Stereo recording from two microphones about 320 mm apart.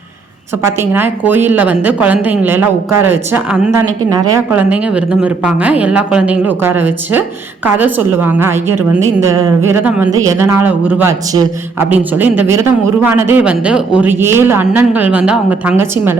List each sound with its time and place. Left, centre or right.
0.8 s speech: centre